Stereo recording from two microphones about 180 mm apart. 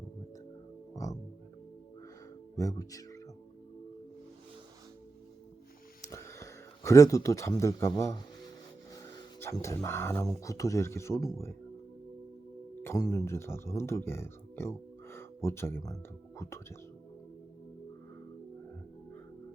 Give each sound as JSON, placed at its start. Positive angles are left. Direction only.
{"t": 0.9, "sound": "music", "side_deg": 20}
{"t": 2.6, "sound": "speech", "side_deg": 20}
{"t": 6.1, "sound": "speech", "side_deg": 15}
{"t": 12.8, "sound": "speech", "side_deg": 15}